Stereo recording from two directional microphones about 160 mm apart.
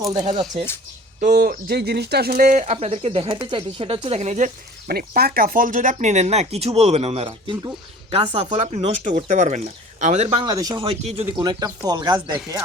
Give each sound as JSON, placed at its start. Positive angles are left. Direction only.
{"t": 0.1, "sound": "speech", "side_deg": -25}
{"t": 1.2, "sound": "speech", "side_deg": -65}
{"t": 8.1, "sound": "speech", "side_deg": -40}
{"t": 10.4, "sound": "speech", "side_deg": -25}
{"t": 10.8, "sound": "speech", "side_deg": -40}
{"t": 11.3, "sound": "speech", "side_deg": -25}